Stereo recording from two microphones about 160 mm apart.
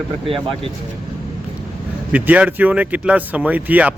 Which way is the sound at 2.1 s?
10° right (ahead or behind).